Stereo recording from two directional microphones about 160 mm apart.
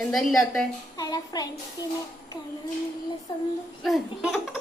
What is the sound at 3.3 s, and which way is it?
Speech, 25° left (ahead or behind).